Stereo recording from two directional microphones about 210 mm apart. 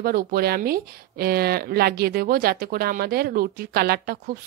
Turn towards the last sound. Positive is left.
turn(degrees=-45)  # may be behind; listen again after turning